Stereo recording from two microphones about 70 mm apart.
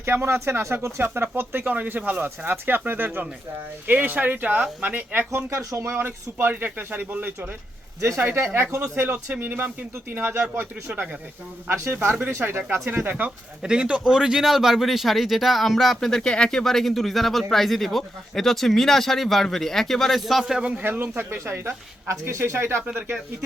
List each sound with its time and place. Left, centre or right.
0.0 s speech: right
5.3 s speech: right
13.6 s speech: centre
20.7 s speech: right
21.2 s speech: right